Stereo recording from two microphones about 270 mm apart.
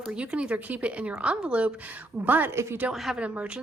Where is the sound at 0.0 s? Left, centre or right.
Centre.